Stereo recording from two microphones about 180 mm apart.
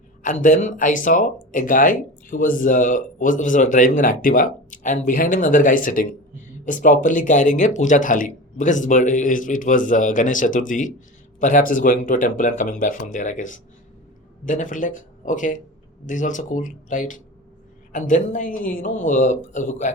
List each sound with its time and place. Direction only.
0.2 s speech: 45° left (ahead or behind)